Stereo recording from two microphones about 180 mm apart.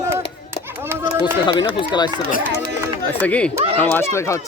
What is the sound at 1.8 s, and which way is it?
Speech, 25° left (ahead or behind).